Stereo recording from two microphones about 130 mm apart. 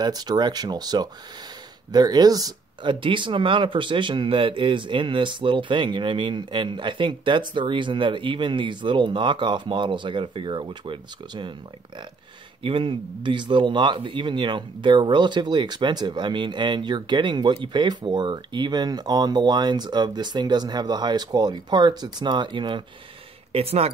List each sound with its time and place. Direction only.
0.0 s speech: 30° right (ahead or behind)
12.6 s speech: 40° right (ahead or behind)
23.5 s speech: 50° right (ahead or behind)